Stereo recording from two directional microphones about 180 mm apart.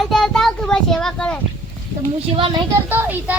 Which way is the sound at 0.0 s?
Centre (ahead or behind).